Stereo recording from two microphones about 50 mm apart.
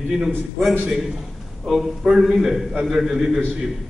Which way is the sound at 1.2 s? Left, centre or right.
Centre.